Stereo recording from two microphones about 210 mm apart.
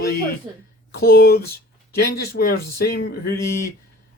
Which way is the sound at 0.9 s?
45° left (ahead or behind).